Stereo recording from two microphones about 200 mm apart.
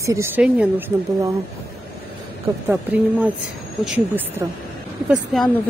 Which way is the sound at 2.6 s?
10° right (ahead or behind).